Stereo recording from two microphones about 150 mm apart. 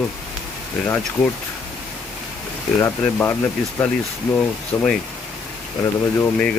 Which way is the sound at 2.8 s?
15° left (ahead or behind).